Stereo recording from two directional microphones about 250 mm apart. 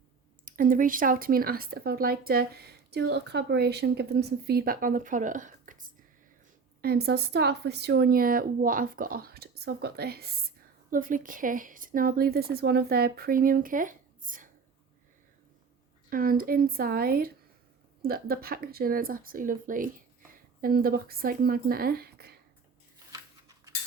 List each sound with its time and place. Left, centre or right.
0.4 s speech: right
16.0 s speech: right